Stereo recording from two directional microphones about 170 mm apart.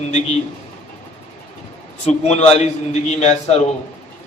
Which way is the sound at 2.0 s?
40° left (ahead or behind).